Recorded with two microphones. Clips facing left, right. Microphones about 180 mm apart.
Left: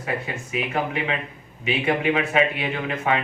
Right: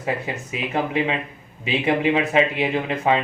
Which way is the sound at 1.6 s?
25° right (ahead or behind).